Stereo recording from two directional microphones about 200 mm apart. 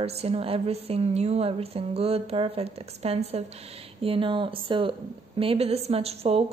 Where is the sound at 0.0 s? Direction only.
30° right (ahead or behind).